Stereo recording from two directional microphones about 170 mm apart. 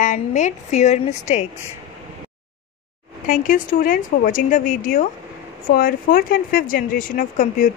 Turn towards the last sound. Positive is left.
turn(degrees=55)  # may be behind; listen again after turning